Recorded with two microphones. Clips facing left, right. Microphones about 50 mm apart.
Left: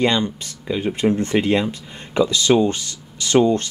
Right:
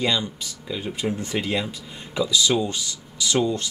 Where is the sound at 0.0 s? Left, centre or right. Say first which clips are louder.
Left 5 dB; left.